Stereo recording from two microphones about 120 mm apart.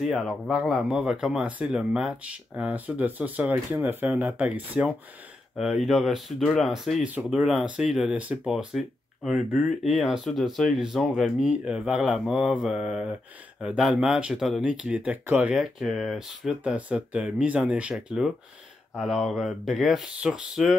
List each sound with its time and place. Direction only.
0.0 s speech: 5° right (ahead or behind)